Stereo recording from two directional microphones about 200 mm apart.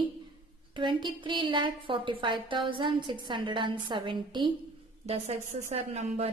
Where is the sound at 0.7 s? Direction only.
25° right (ahead or behind).